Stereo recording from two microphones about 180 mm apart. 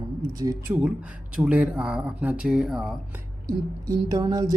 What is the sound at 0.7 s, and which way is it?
A woman's voice, 5° right (ahead or behind).